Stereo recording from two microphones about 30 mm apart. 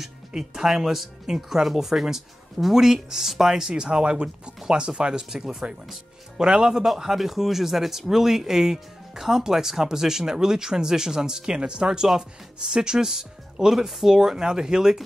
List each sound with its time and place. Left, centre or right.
0.4 s speech: centre
3.7 s speech: right
5.3 s speech: right
6.8 s speech: centre
9.4 s speech: centre
14.1 s speech: right